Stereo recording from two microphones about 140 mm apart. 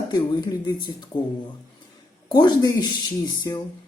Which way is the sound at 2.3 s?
35° left (ahead or behind).